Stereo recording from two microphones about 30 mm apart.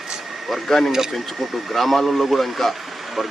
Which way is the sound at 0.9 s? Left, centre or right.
Centre.